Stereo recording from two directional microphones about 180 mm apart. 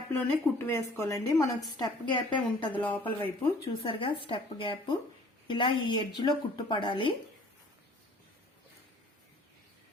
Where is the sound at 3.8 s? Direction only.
30° left (ahead or behind).